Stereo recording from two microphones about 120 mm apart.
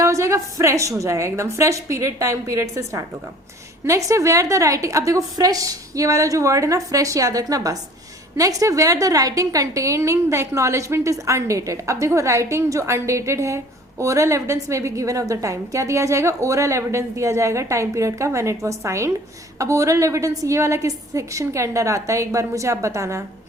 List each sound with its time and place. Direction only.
0.0 s a woman's voice: 25° right (ahead or behind)